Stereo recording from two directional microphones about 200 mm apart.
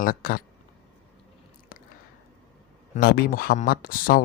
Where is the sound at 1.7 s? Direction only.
45° left (ahead or behind).